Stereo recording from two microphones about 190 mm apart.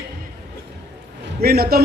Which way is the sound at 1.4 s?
55° right (ahead or behind).